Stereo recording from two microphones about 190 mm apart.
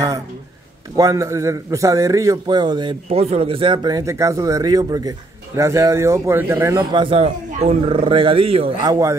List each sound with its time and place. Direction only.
0.9 s a man's voice: 15° right (ahead or behind)